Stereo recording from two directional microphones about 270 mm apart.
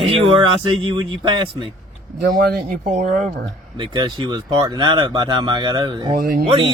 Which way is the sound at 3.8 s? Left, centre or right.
Centre.